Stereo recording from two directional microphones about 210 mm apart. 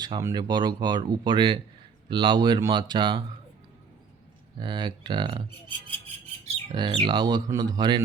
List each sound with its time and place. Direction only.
0.0 s speech: 15° right (ahead or behind)
4.6 s speech: 20° right (ahead or behind)
6.7 s speech: 25° right (ahead or behind)